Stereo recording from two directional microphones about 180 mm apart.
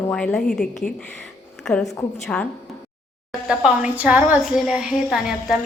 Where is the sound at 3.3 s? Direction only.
5° right (ahead or behind).